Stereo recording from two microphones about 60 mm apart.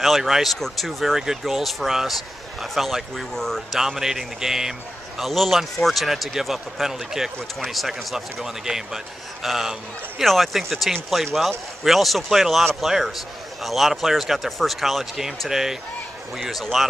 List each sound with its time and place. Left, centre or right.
0.0 s a man's voice: centre
3.8 s a man's voice: centre